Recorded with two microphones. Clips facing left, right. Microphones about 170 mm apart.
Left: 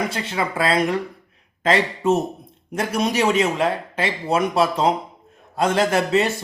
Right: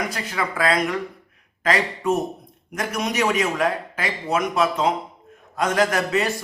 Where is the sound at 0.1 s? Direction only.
25° left (ahead or behind).